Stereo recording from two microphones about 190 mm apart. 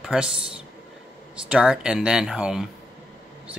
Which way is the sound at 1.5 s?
5° right (ahead or behind).